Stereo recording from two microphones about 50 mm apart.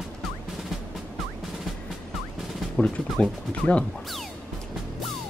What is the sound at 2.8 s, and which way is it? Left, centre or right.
Speech, left.